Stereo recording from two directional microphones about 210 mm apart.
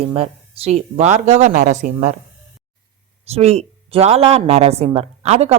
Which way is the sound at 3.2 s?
30° right (ahead or behind).